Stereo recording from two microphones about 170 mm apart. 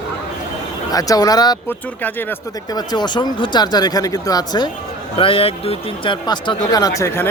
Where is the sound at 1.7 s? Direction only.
10° left (ahead or behind).